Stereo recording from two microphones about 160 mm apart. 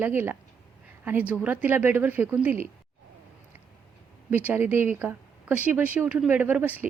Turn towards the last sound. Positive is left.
turn(degrees=-10)  # may be behind; listen again after turning